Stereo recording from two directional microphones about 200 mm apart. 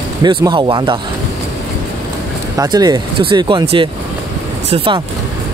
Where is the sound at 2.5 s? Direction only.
20° right (ahead or behind).